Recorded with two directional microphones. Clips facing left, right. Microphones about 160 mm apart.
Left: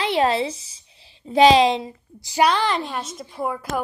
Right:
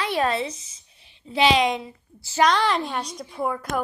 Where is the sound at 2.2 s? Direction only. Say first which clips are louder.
Left 1 dB; 10° left (ahead or behind).